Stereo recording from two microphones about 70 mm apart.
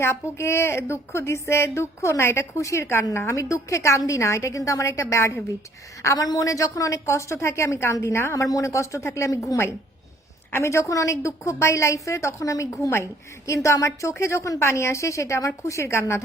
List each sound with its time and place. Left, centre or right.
0.0 s a woman's voice: left
6.1 s a woman's voice: left